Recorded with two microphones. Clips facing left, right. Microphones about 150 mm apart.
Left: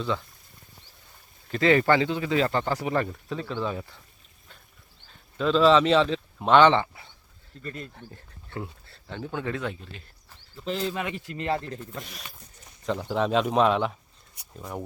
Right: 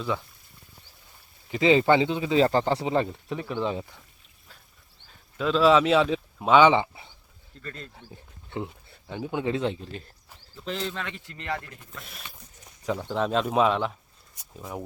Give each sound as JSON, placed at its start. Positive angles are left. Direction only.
{"t": 1.5, "sound": "speech", "side_deg": -15}
{"t": 2.4, "sound": "speech", "side_deg": -30}
{"t": 5.0, "sound": "speech", "side_deg": -5}
{"t": 7.6, "sound": "speech", "side_deg": 10}
{"t": 7.9, "sound": "speech", "side_deg": -15}
{"t": 10.7, "sound": "speech", "side_deg": 0}
{"t": 10.9, "sound": "speech", "side_deg": 15}
{"t": 11.9, "sound": "speech", "side_deg": 0}